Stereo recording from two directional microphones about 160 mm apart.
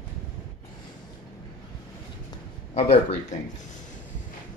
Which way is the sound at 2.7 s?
40° left (ahead or behind).